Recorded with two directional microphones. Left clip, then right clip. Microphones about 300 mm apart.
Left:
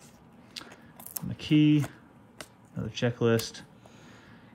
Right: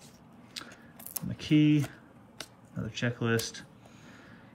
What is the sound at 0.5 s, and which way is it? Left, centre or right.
Biting, centre.